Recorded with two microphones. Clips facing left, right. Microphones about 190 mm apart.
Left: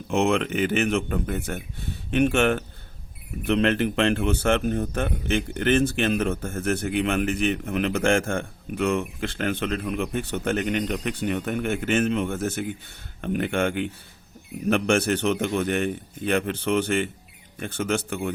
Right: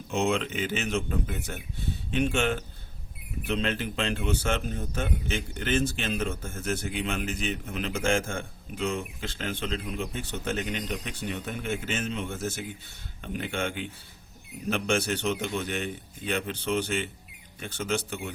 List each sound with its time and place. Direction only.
0.1 s speech: 60° left (ahead or behind)